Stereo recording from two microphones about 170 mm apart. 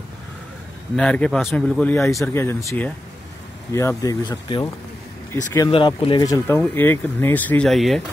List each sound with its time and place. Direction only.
0.9 s speech: 5° left (ahead or behind); by 4.6 s 25° left (ahead or behind)
5.7 s speech: 30° left (ahead or behind)
6.2 s speech: 20° left (ahead or behind); by 8.0 s centre (ahead or behind)